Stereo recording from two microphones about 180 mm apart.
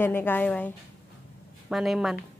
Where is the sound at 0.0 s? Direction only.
10° left (ahead or behind).